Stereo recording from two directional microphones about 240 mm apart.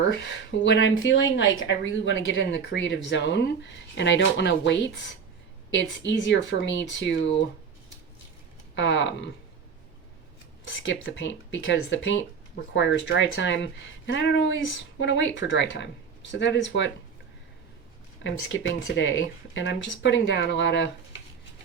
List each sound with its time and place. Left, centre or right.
0.1 s speech: left
8.7 s speech: left
10.8 s speech: left
18.2 s speech: left